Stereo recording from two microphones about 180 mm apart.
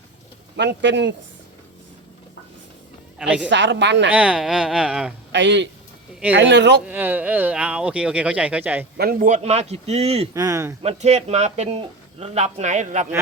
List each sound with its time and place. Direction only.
0.5 s speech: 70° right (ahead or behind)
3.2 s speech: 5° right (ahead or behind)
3.5 s a woman's voice: 85° right
4.1 s speech: 5° right (ahead or behind)
5.3 s a woman's voice: 80° right
6.8 s speech: 10° right (ahead or behind)
9.0 s a man's voice: 55° right (ahead or behind); by 10.2 s 35° right (ahead or behind)
10.3 s speech: 20° right (ahead or behind)
10.8 s a man's voice: 40° right (ahead or behind)